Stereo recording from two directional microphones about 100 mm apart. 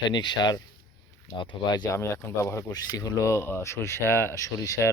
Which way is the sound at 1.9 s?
30° left (ahead or behind).